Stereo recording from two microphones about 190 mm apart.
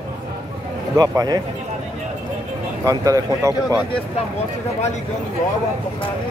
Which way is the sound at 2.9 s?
20° right (ahead or behind).